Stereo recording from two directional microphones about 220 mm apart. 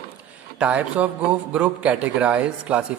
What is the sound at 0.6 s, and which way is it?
A man's voice, 5° right (ahead or behind).